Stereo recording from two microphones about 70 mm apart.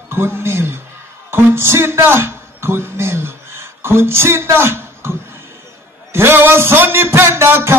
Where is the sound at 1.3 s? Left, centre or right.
Right.